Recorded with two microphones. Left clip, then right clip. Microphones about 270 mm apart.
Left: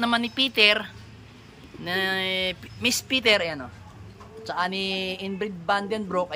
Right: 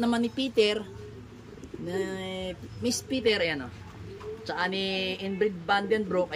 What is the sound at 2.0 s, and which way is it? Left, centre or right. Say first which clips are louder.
Speech: left 9 dB; left.